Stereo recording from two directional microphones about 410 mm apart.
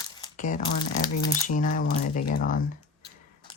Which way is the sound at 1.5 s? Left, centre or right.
Centre.